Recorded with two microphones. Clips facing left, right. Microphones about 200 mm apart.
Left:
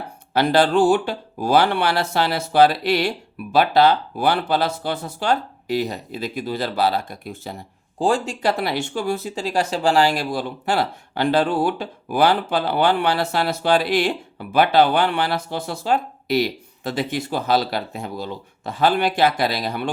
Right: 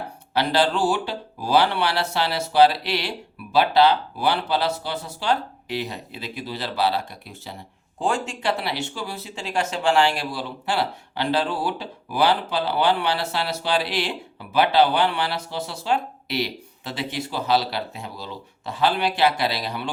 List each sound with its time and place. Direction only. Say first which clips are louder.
0.3 s speech: left 5 dB; 50° left (ahead or behind)
7.9 s speech: left 5 dB; 35° left (ahead or behind)